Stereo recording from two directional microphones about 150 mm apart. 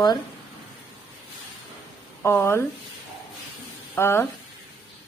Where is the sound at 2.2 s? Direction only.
15° left (ahead or behind).